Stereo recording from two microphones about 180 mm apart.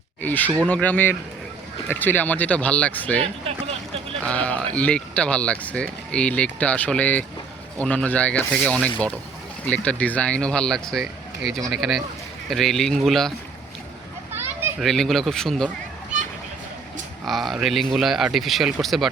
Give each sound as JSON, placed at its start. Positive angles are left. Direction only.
{"t": 0.2, "sound": "speech", "side_deg": 10}
{"t": 3.2, "sound": "a sound", "side_deg": -35}
{"t": 4.2, "sound": "speech", "side_deg": 5}
{"t": 14.8, "sound": "speech", "side_deg": 0}
{"t": 17.2, "sound": "speech", "side_deg": 0}